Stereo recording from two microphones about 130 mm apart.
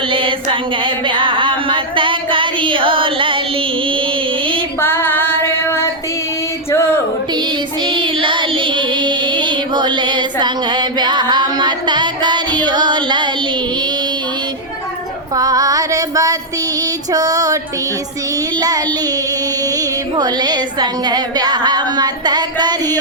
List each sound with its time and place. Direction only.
0.1 s a sound: 40° right (ahead or behind)
0.5 s female singing: 40° right (ahead or behind)
4.8 s female singing: 15° left (ahead or behind)
6.7 s a sound: 20° left (ahead or behind)
7.3 s child singing: 35° right (ahead or behind)
15.4 s music: 30° right (ahead or behind)
17.1 s female singing: 30° right (ahead or behind)
19.6 s female singing: 30° right (ahead or behind)